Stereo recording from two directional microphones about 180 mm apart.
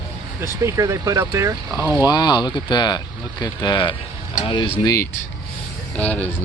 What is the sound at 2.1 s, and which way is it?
Speech, 25° left (ahead or behind).